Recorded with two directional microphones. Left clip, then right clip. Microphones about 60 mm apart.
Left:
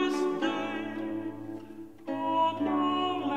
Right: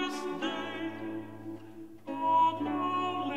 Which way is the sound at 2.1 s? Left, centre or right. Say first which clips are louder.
Right 2 dB; right.